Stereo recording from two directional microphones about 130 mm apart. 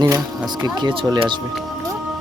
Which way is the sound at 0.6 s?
35° right (ahead or behind).